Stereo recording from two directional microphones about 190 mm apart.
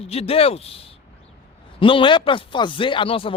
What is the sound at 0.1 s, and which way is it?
A man's voice, 30° left (ahead or behind).